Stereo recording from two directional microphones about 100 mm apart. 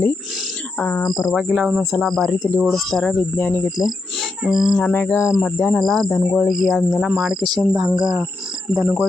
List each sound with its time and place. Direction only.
0.8 s speech: 15° left (ahead or behind)
1.3 s speech: 5° left (ahead or behind)
4.4 s speech: 5° right (ahead or behind)
4.8 s cricket: 20° left (ahead or behind)
5.5 s speech: 10° left (ahead or behind)
7.9 s speech: 10° right (ahead or behind)